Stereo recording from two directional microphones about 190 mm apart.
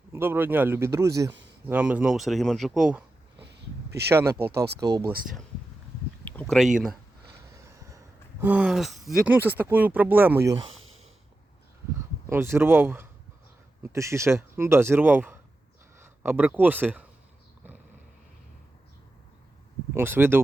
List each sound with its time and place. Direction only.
0.1 s speech: 10° right (ahead or behind)
3.4 s a sound: 65° right (ahead or behind)
4.1 s speech: 15° right (ahead or behind)
4.4 s speech: 55° right (ahead or behind)
4.8 s speech: 20° right (ahead or behind)
6.2 s a sound: 10° left (ahead or behind)
7.5 s speech: 15° right (ahead or behind)
11.9 s speech: 15° right (ahead or behind)
19.9 s speech: 10° right (ahead or behind)